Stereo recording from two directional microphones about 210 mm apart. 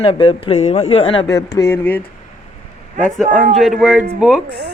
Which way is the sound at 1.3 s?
15° left (ahead or behind).